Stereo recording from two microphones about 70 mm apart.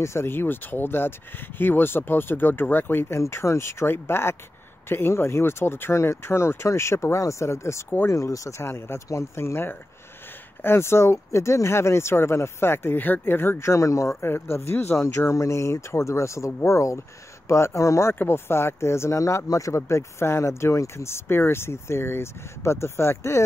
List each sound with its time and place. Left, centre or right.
0.0 s speech: left
13.7 s speech: left
14.2 s speech: left
18.1 s speech: left